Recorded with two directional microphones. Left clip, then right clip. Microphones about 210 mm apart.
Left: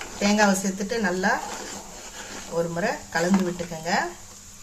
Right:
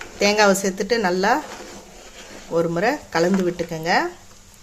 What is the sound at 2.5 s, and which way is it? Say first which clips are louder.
Speech: right 6 dB; 45° right (ahead or behind).